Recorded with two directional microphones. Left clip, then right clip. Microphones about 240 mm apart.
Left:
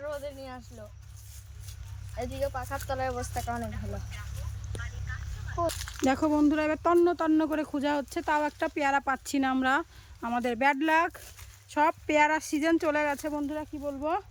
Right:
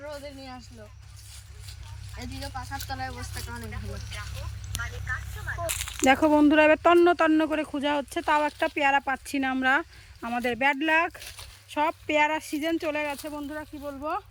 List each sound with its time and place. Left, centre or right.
0.0 s a sound: centre
2.1 s speech: left
5.8 s speech: centre